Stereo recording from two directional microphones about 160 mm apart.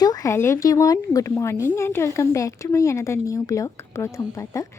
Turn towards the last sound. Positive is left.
turn(degrees=20)  # may be behind; listen again after turning